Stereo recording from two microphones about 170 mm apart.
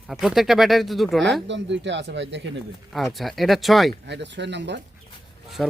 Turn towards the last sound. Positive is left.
turn(degrees=0)  # may be behind; listen again after turning